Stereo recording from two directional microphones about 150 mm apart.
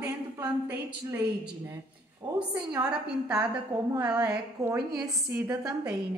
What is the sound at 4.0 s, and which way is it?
Speech, 10° right (ahead or behind).